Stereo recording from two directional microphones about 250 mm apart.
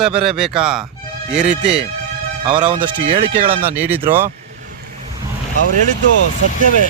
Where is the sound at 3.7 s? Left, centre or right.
Centre.